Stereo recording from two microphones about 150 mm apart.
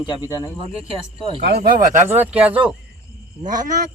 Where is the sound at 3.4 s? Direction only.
60° right (ahead or behind).